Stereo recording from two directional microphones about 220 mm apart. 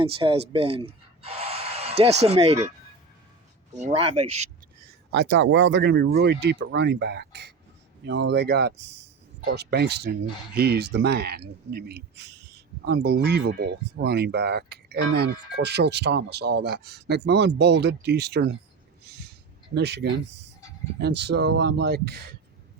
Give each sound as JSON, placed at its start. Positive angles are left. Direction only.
{"t": 0.0, "sound": "speech", "side_deg": -25}
{"t": 5.1, "sound": "speech", "side_deg": -50}
{"t": 19.0, "sound": "a sound", "side_deg": -45}
{"t": 19.7, "sound": "speech", "side_deg": -50}